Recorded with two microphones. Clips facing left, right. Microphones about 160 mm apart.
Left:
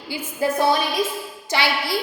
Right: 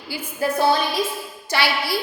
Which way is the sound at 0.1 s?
20° left (ahead or behind).